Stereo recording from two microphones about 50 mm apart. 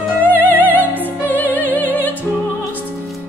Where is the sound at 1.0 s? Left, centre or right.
Left.